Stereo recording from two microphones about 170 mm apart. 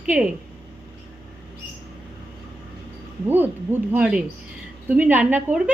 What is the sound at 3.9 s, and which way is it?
A woman's voice, 5° right (ahead or behind).